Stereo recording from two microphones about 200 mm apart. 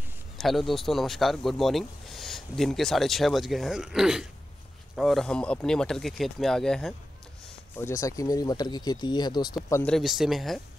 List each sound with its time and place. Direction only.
0.4 s speech: centre (ahead or behind)
7.7 s speech: 15° left (ahead or behind)
9.9 s speech: centre (ahead or behind)